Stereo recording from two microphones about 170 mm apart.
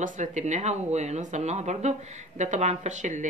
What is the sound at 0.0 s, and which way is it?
Speech, 45° right (ahead or behind).